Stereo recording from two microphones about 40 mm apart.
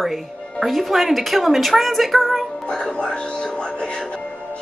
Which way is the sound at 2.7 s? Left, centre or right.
Left.